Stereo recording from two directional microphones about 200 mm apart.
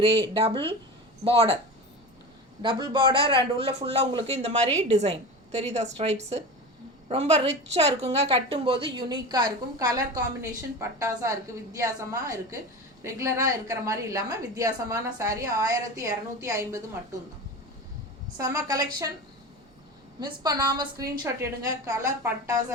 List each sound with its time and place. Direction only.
0.3 s a woman's voice: 25° right (ahead or behind)
2.6 s a woman's voice: 20° right (ahead or behind)
18.3 s a woman's voice: 20° right (ahead or behind)
20.1 s a woman's voice: 20° right (ahead or behind)